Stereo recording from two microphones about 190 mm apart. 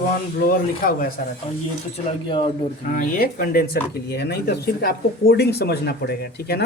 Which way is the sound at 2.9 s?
50° left (ahead or behind).